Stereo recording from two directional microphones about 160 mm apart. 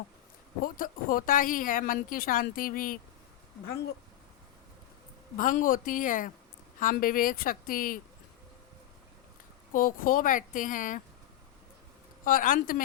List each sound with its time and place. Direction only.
0.6 s speech: 60° left (ahead or behind)
5.4 s speech: 55° left (ahead or behind)
9.7 s speech: 60° left (ahead or behind)
12.2 s speech: 60° left (ahead or behind)